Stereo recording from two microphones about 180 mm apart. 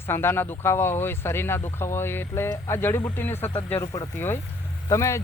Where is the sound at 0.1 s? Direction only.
15° left (ahead or behind).